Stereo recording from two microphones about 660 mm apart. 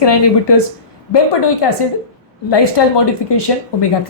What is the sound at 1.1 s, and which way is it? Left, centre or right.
A woman's voice, left.